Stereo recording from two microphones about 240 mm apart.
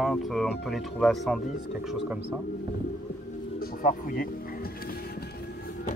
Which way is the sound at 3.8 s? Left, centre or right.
Left.